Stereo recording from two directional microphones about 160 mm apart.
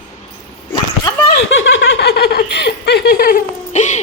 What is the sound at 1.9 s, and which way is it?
Speech, 90° left.